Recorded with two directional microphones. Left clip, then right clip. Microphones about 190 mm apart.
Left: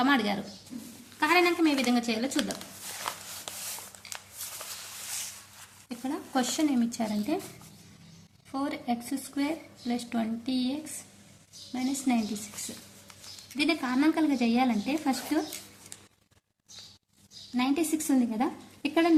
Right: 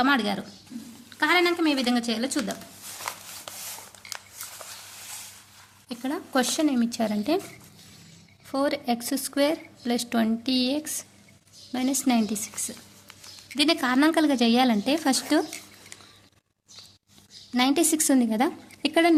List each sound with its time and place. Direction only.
0.0 s a woman's voice: 25° right (ahead or behind)
3.5 s a sound: 30° right (ahead or behind)
5.9 s speech: 35° right (ahead or behind)
8.5 s speech: 35° right (ahead or behind)
13.6 s a woman's voice: 40° right (ahead or behind)
17.5 s a woman's voice: 45° right (ahead or behind)